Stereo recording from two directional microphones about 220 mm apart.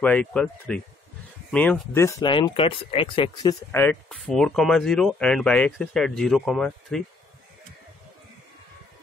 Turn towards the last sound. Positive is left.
turn(degrees=0)  # may be behind; listen again after turning